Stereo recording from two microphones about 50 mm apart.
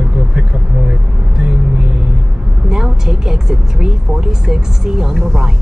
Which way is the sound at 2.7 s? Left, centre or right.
Centre.